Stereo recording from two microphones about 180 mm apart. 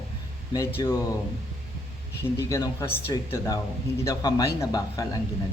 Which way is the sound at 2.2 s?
15° left (ahead or behind).